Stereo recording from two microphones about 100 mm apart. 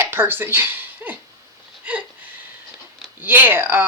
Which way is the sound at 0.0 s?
20° right (ahead or behind).